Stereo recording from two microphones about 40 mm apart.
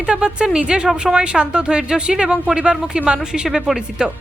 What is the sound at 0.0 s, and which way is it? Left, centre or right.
Speech, right.